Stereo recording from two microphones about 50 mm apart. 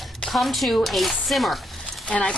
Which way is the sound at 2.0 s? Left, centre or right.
Left.